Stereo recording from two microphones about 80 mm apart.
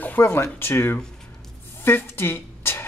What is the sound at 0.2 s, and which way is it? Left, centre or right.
Speech, left.